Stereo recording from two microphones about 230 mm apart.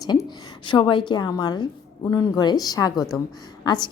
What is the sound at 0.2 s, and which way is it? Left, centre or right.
A woman's voice, left.